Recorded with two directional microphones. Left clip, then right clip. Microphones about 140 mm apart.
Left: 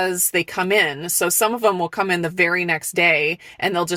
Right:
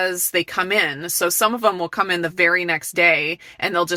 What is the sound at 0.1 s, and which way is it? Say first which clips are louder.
Speech: even; 15° left (ahead or behind).